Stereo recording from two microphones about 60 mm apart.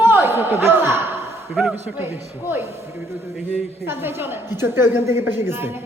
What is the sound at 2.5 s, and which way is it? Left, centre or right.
Speech, right.